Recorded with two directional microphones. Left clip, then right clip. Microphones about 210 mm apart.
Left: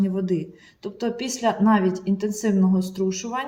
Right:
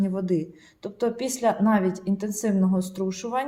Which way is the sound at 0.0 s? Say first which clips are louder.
Left 1 dB; 20° right (ahead or behind).